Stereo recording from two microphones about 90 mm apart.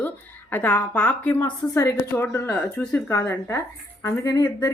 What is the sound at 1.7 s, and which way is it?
Speech, 35° left (ahead or behind).